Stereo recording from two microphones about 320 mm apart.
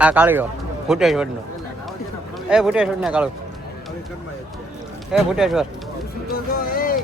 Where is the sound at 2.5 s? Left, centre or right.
Centre.